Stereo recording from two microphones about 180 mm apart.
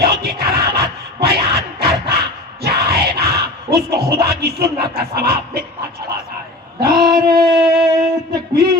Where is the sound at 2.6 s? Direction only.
60° right (ahead or behind).